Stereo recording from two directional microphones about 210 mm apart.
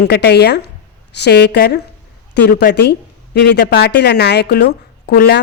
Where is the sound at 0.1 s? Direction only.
50° left (ahead or behind).